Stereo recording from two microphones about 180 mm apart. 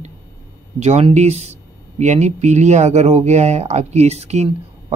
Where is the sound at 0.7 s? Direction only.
40° right (ahead or behind).